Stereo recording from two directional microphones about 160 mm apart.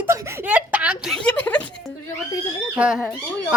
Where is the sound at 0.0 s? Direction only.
15° right (ahead or behind); by 1.6 s 10° left (ahead or behind).